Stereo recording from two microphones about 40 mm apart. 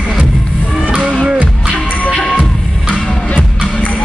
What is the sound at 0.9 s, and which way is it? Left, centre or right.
Music, right.